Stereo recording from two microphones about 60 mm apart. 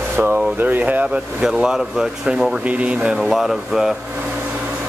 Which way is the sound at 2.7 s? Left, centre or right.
Right.